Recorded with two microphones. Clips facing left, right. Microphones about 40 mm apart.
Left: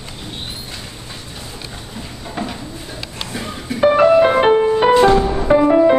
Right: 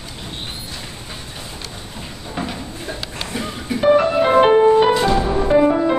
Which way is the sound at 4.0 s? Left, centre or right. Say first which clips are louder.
Left 3 dB; centre.